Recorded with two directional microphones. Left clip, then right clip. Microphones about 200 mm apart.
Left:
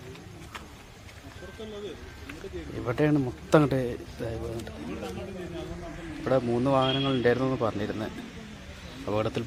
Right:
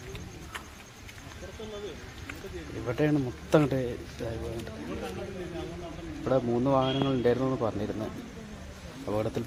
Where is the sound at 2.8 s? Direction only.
15° left (ahead or behind).